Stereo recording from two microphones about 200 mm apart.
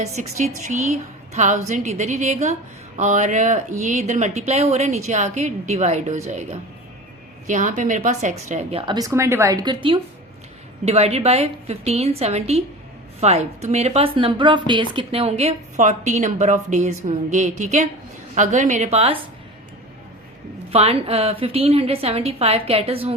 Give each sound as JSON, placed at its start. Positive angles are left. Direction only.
{"t": 0.0, "sound": "a woman's voice", "side_deg": -35}
{"t": 8.9, "sound": "a woman's voice", "side_deg": -15}
{"t": 20.7, "sound": "a woman's voice", "side_deg": -30}